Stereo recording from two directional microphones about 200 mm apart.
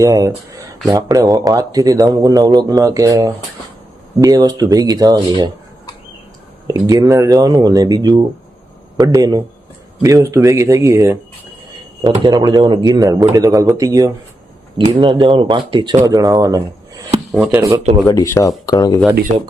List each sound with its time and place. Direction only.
0.0 s speech: 15° right (ahead or behind)
6.7 s speech: 15° right (ahead or behind)
18.0 s speech: 15° left (ahead or behind)